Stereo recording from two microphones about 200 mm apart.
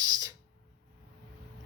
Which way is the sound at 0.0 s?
20° right (ahead or behind).